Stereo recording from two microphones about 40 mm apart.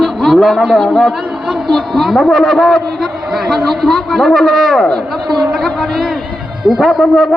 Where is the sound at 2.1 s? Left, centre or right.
Centre.